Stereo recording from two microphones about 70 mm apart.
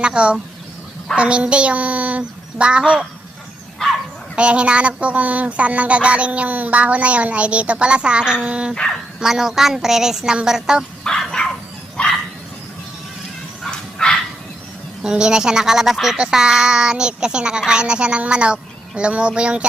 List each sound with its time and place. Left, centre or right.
0.0 s speech: centre
3.8 s bow-wow: centre
4.4 s speech: centre
8.7 s speech: centre
9.2 s speech: centre
11.0 s dog: centre
13.6 s dog: centre
15.0 s speech: centre